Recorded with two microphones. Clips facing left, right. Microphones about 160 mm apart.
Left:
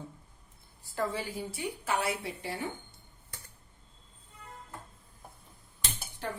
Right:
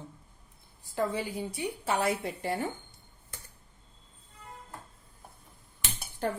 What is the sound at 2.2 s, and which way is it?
Speech, 45° right (ahead or behind).